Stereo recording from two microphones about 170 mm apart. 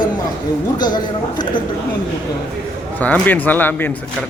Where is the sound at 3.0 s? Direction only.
10° left (ahead or behind).